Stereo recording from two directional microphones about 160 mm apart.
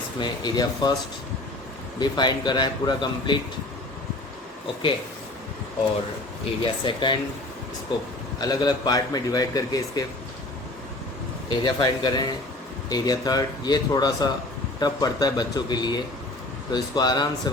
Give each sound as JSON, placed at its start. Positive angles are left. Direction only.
{"t": 0.2, "sound": "a man's voice", "side_deg": 25}
{"t": 2.0, "sound": "a man's voice", "side_deg": 25}
{"t": 6.6, "sound": "a man's voice", "side_deg": 30}
{"t": 8.4, "sound": "a man's voice", "side_deg": 25}
{"t": 11.4, "sound": "a man's voice", "side_deg": 30}